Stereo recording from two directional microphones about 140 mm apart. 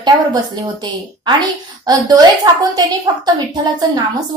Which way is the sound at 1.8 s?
30° right (ahead or behind).